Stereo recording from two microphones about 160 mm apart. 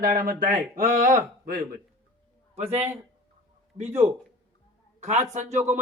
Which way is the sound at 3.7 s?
40° right (ahead or behind).